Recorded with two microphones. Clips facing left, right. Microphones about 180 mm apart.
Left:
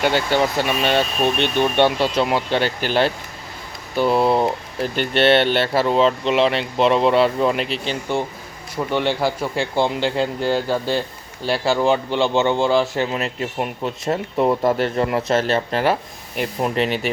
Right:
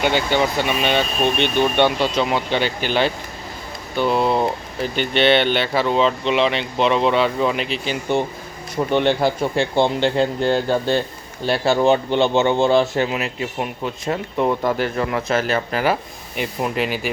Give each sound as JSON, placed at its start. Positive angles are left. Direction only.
{"t": 0.0, "sound": "speech", "side_deg": 5}
{"t": 8.7, "sound": "speech", "side_deg": -20}
{"t": 14.9, "sound": "speech", "side_deg": 30}
{"t": 15.8, "sound": "speech", "side_deg": 0}